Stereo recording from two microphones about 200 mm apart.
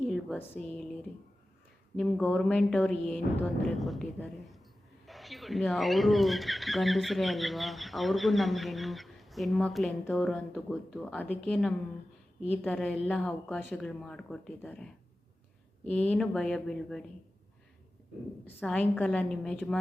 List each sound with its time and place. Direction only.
0.0 s speech: 5° left (ahead or behind)
2.0 s speech: 5° left (ahead or behind)
18.4 s speech: 5° left (ahead or behind)